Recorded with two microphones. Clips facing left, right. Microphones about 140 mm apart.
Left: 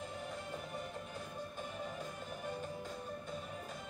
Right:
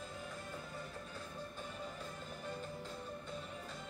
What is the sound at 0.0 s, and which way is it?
Music, 20° left (ahead or behind).